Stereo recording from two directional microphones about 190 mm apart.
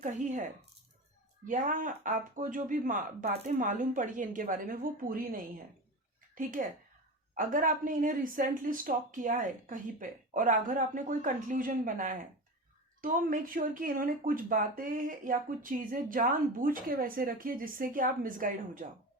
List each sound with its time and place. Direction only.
0.0 s speech: 40° right (ahead or behind)
1.5 s speech: 45° right (ahead or behind)